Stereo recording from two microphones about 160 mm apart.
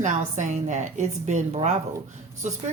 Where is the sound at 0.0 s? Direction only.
50° right (ahead or behind).